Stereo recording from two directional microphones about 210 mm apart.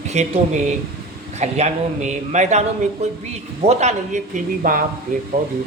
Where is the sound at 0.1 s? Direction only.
30° right (ahead or behind).